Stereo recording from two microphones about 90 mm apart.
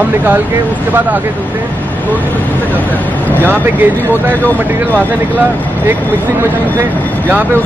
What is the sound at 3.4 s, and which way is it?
Speech, 25° right (ahead or behind).